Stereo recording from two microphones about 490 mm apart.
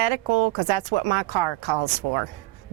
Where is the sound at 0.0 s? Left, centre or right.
Right.